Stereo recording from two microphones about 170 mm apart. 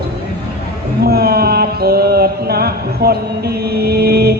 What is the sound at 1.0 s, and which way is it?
Mantra, 65° right (ahead or behind).